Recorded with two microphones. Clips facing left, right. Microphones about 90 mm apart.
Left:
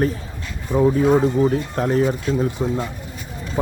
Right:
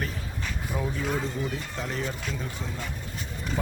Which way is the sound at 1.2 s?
45° left (ahead or behind).